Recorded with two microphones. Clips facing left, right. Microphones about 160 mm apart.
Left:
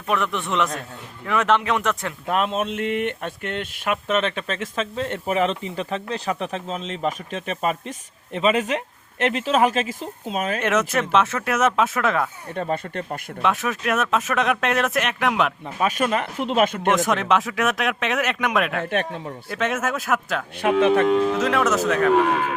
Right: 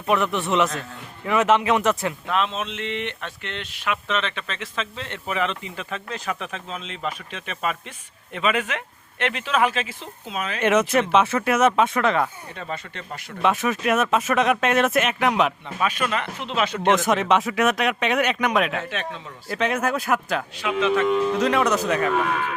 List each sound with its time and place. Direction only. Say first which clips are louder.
0.1 s speech: right 2 dB; centre (ahead or behind)
2.3 s speech: left 5 dB; 50° left (ahead or behind)
10.6 s speech: right 6 dB; centre (ahead or behind)
12.5 s speech: left 8 dB; 50° left (ahead or behind)
13.4 s speech: right 2 dB; centre (ahead or behind)
15.8 s speech: left 3 dB; 40° left (ahead or behind)
16.9 s speech: right 1 dB; centre (ahead or behind)
18.7 s speech: left 4 dB; 55° left (ahead or behind)
19.5 s speech: right 2 dB; centre (ahead or behind)
20.6 s speech: left 5 dB; 55° left (ahead or behind)
21.4 s speech: even; centre (ahead or behind)